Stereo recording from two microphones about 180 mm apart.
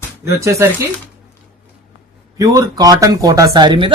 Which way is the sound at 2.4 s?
20° right (ahead or behind).